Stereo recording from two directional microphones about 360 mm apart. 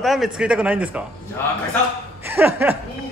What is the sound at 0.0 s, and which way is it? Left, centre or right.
Speech, centre.